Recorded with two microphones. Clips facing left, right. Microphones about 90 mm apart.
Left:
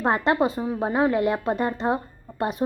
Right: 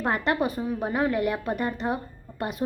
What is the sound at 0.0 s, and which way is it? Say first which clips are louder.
A woman's voice: left 4 dB; 25° left (ahead or behind).